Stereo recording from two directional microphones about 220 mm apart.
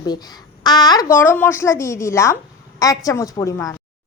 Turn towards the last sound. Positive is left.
turn(degrees=15)  # may be behind; listen again after turning